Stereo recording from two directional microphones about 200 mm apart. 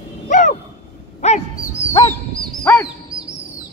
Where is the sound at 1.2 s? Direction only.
35° left (ahead or behind).